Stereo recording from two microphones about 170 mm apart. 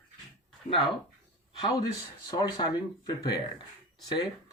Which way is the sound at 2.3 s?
25° left (ahead or behind).